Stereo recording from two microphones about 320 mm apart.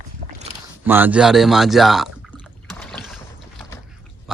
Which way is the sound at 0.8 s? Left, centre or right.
Centre.